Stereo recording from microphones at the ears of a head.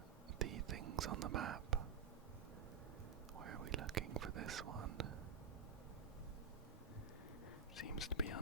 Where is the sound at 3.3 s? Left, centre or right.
Right.